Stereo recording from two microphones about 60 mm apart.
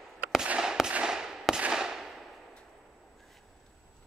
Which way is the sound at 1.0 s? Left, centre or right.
Centre.